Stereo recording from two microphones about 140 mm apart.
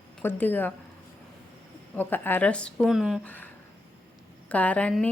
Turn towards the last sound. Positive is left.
turn(degrees=10)  # may be behind; listen again after turning